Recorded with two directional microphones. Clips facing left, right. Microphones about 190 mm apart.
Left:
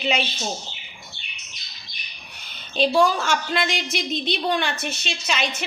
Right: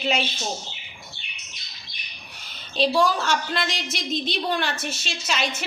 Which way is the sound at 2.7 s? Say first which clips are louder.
Left 2 dB; centre (ahead or behind).